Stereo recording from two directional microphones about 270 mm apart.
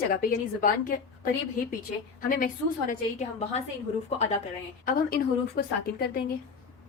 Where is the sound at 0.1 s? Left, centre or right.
Left.